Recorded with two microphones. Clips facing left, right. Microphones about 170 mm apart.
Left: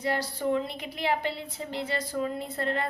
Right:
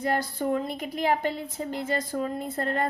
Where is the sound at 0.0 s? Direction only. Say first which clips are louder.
Right 2 dB; 50° right (ahead or behind).